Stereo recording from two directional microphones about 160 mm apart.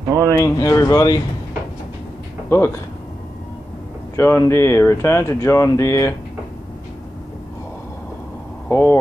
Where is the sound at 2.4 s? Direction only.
15° left (ahead or behind).